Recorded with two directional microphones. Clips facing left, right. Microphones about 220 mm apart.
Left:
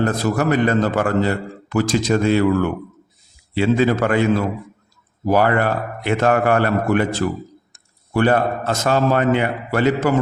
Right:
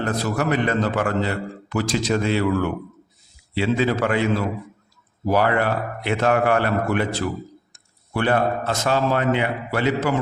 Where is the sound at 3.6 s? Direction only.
45° left (ahead or behind).